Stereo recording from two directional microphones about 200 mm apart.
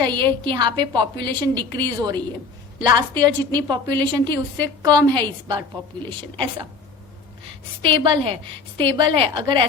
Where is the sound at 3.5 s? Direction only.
20° right (ahead or behind).